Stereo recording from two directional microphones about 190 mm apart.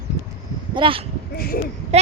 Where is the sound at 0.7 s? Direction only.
30° right (ahead or behind).